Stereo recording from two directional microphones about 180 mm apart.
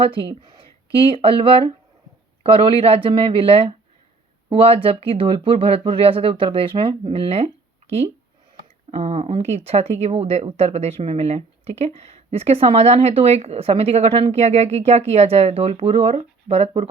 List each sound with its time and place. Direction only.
0.0 s speech: 30° right (ahead or behind)
8.9 s speech: 35° right (ahead or behind)